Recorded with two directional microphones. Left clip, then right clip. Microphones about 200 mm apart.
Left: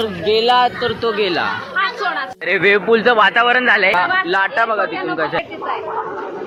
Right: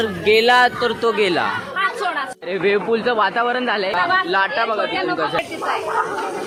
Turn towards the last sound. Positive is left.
turn(degrees=-15)  # may be behind; listen again after turning